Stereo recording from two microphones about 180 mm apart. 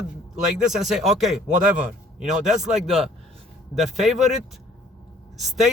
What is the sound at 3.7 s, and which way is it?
Speech, centre (ahead or behind).